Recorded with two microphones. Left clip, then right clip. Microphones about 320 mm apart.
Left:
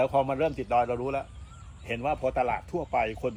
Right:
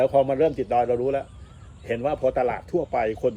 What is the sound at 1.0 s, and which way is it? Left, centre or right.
Speech, left.